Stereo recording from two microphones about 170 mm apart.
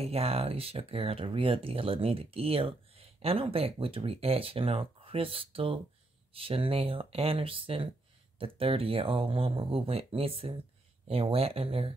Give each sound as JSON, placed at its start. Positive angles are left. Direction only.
{"t": 0.0, "sound": "speech", "side_deg": -35}